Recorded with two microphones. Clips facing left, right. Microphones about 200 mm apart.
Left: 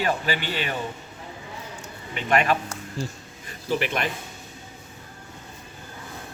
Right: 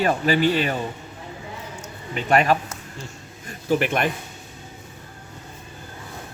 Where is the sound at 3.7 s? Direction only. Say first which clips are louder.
Right 5 dB; 50° right (ahead or behind).